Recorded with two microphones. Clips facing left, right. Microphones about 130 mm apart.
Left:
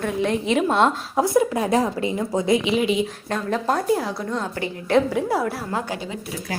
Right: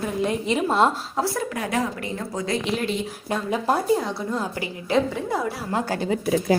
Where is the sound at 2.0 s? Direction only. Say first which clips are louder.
Left 6 dB; 20° left (ahead or behind).